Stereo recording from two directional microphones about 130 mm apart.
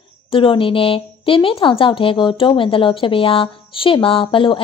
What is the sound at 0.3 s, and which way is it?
A woman's voice, 45° left (ahead or behind).